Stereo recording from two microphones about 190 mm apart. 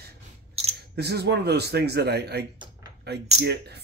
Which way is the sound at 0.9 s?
60° right (ahead or behind).